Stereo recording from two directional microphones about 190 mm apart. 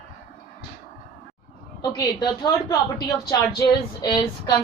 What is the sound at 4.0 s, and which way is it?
Speech, 25° left (ahead or behind).